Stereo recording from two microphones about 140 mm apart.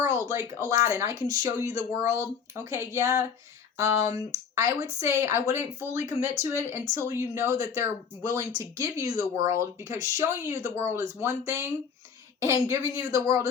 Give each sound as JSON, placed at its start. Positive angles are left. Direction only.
{"t": 0.7, "sound": "speech", "side_deg": -20}